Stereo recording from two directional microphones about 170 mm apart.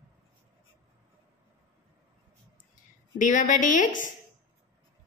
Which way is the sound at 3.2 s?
50° left (ahead or behind).